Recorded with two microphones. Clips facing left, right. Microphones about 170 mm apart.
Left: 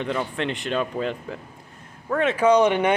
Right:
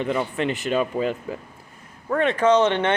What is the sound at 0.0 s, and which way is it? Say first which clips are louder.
Speech: right 2 dB; 5° right (ahead or behind).